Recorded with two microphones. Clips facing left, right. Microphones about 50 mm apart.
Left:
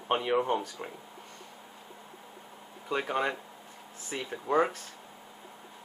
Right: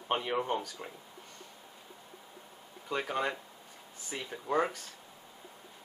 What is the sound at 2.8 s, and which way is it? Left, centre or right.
Speech, centre.